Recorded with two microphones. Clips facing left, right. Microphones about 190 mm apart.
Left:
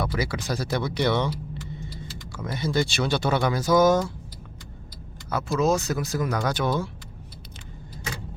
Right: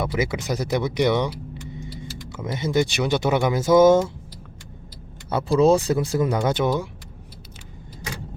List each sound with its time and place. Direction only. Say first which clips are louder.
0.0 s speech: right 3 dB; 20° right (ahead or behind)
2.3 s speech: right 3 dB; 20° right (ahead or behind)
5.3 s speech: right 6 dB; 30° right (ahead or behind)